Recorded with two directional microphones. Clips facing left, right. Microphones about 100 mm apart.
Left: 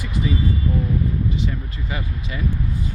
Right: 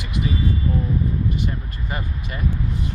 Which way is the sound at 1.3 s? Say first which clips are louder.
Even; 50° right (ahead or behind).